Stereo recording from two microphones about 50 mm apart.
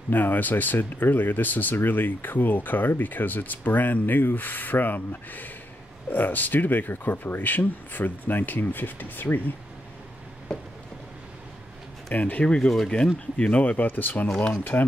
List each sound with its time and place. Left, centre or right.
0.1 s speech: left
10.5 s speech: centre
12.1 s speech: left
12.4 s speech: centre
12.9 s speech: left